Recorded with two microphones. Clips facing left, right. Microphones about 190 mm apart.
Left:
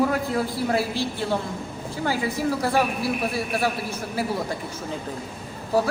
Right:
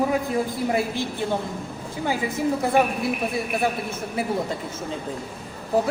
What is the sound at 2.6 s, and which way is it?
Speech, 20° right (ahead or behind).